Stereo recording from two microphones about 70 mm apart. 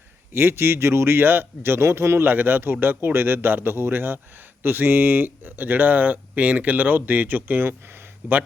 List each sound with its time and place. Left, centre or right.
0.3 s speech: right